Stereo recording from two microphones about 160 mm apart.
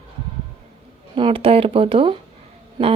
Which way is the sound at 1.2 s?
35° right (ahead or behind).